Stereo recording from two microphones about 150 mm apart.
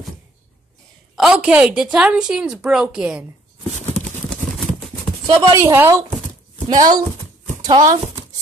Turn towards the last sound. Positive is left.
turn(degrees=-25)  # may be behind; listen again after turning